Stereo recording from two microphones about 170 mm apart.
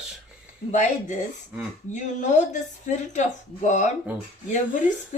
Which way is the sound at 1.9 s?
45° left (ahead or behind).